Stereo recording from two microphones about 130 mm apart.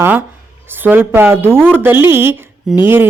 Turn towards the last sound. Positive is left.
turn(degrees=-15)  # may be behind; listen again after turning